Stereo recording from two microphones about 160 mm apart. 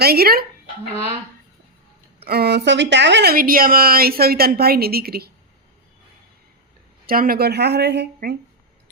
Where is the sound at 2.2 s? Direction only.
85° right.